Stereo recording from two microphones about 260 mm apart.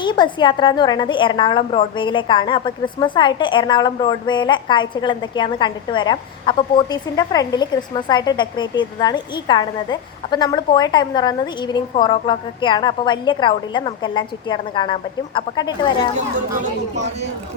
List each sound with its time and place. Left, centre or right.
0.0 s a woman's voice: centre